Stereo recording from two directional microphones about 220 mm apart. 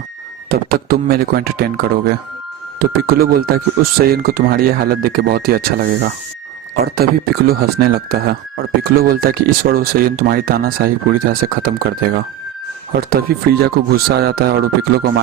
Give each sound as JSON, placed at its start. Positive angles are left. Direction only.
{"t": 0.5, "sound": "speech", "side_deg": -45}